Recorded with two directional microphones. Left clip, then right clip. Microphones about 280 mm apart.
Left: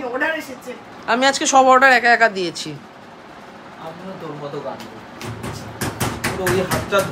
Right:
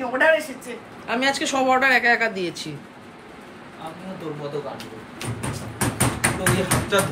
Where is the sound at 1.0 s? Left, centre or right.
Centre.